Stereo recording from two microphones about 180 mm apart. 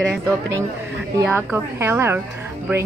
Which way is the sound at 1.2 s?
10° right (ahead or behind).